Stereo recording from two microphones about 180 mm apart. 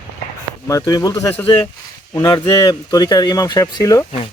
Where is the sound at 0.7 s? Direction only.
20° left (ahead or behind).